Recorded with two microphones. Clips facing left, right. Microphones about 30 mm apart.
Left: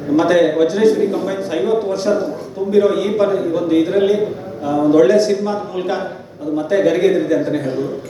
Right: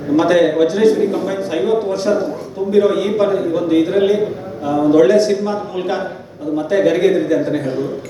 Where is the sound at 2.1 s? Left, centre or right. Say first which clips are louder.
Even; right.